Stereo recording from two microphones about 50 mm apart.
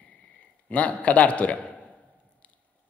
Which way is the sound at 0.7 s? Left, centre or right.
Left.